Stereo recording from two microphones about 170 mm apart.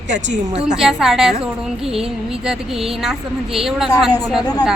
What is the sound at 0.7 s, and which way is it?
A woman's voice, 5° right (ahead or behind).